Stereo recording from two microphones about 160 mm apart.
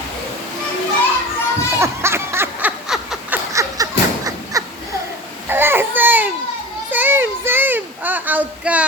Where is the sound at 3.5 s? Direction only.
20° right (ahead or behind).